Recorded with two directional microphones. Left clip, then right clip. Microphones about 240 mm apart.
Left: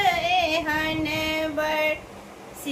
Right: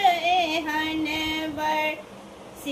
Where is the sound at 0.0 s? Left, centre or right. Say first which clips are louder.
Right 1 dB; centre.